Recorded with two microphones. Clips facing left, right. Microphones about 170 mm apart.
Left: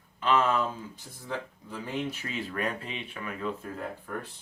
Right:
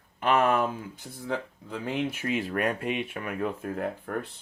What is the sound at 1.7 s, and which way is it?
Speech, 60° right (ahead or behind).